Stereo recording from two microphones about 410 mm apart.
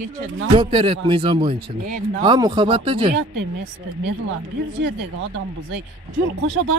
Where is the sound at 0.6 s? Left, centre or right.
Centre.